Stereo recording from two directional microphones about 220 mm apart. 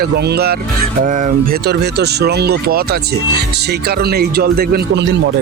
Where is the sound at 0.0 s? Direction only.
45° right (ahead or behind).